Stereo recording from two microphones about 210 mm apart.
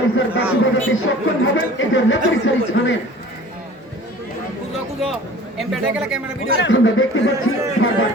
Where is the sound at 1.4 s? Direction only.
65° left (ahead or behind).